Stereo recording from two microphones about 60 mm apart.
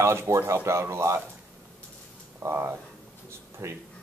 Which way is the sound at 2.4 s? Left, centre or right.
Right.